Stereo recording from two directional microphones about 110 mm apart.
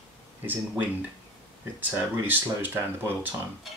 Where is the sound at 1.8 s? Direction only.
15° right (ahead or behind).